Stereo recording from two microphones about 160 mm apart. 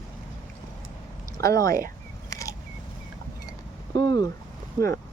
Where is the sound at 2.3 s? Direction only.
20° left (ahead or behind).